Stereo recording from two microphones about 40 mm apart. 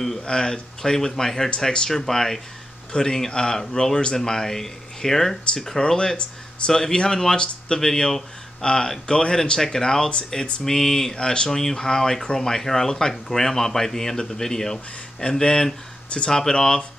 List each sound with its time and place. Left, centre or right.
0.2 s speech: centre
6.7 s speech: centre
7.3 s speech: left
10.6 s speech: centre